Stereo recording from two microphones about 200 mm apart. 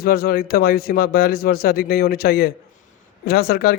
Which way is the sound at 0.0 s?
50° left (ahead or behind).